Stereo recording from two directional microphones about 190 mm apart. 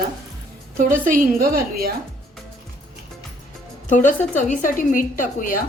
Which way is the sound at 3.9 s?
40° left (ahead or behind).